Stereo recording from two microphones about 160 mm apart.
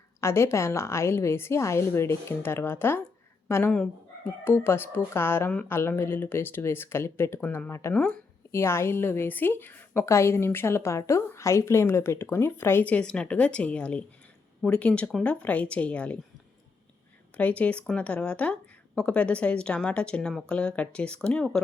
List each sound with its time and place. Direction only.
0.2 s a woman's voice: 15° left (ahead or behind)
7.9 s speech: 5° left (ahead or behind)
8.5 s a woman's voice: 15° left (ahead or behind)
17.3 s a woman's voice: 10° left (ahead or behind)